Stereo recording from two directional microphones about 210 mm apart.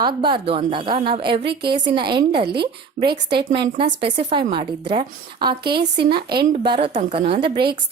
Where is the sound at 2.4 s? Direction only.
50° right (ahead or behind).